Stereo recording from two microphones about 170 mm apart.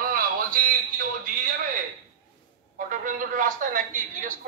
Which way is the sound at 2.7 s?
50° right (ahead or behind).